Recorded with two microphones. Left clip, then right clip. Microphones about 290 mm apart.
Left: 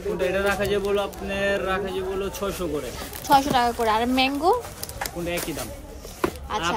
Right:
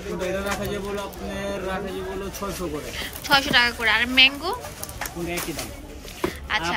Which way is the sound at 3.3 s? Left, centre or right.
Centre.